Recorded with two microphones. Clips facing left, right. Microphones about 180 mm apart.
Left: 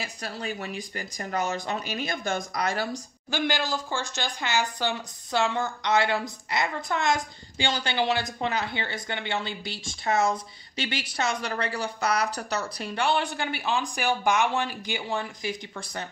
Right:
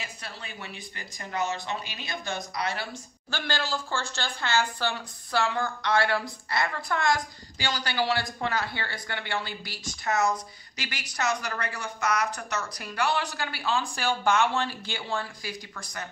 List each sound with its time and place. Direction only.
0.0 s speech: 40° left (ahead or behind)
3.3 s speech: 15° left (ahead or behind)